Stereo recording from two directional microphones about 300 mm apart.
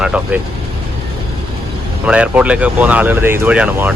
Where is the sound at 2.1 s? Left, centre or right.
Centre.